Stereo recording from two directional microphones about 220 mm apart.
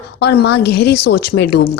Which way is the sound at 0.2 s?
50° left (ahead or behind).